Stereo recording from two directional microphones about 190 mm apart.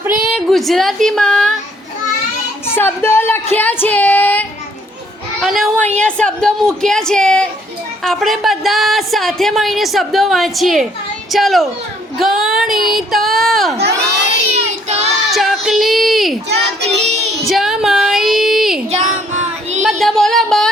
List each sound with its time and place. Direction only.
0.0 s speech: 5° right (ahead or behind)
2.7 s a woman's voice: 10° left (ahead or behind)
14.5 s child singing: 35° right (ahead or behind)
15.3 s child singing: centre (ahead or behind)
16.9 s child singing: 35° right (ahead or behind)
17.4 s child singing: centre (ahead or behind)
18.9 s child singing: 35° right (ahead or behind)
19.8 s a sound: centre (ahead or behind)